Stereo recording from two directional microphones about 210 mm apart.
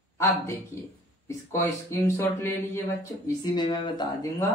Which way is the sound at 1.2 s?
10° left (ahead or behind).